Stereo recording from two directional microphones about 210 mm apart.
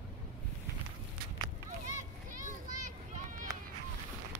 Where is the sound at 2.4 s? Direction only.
40° right (ahead or behind).